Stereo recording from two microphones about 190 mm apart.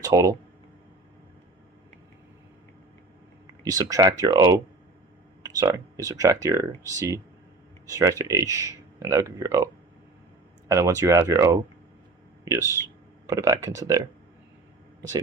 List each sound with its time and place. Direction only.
0.0 s speech: 15° right (ahead or behind)
3.6 s speech: 20° right (ahead or behind)
10.7 s speech: 15° right (ahead or behind)
13.2 s speech: 15° right (ahead or behind)